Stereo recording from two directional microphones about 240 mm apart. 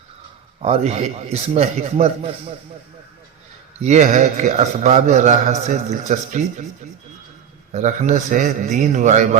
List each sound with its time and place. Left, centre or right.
0.6 s a man's voice: right
3.8 s a man's voice: right
7.7 s a man's voice: right